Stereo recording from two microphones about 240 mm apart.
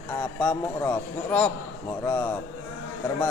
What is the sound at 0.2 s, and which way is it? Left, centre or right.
A man's voice, centre.